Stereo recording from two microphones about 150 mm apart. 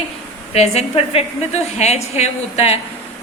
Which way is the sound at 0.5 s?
45° left (ahead or behind).